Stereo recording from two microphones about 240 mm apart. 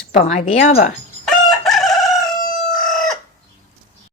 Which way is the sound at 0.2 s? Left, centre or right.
Left.